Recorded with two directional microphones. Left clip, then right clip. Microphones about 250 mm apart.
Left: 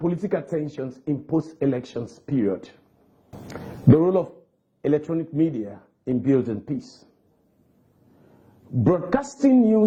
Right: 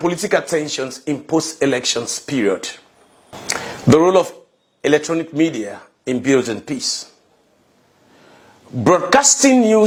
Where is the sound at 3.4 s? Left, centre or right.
Centre.